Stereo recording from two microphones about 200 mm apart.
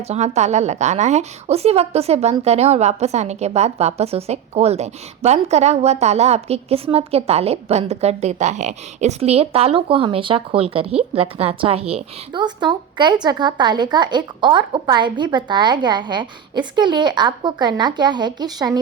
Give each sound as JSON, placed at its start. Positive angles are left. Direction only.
{"t": 0.1, "sound": "a woman's voice", "side_deg": -35}